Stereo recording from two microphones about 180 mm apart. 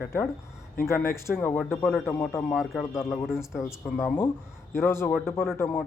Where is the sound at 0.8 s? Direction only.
15° left (ahead or behind).